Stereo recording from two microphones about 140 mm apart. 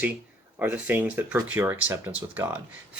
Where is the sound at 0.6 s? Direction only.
10° right (ahead or behind).